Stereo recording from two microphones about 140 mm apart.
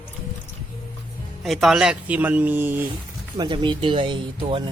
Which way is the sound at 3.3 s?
35° right (ahead or behind).